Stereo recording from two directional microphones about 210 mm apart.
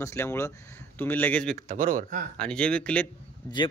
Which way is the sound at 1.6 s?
35° right (ahead or behind).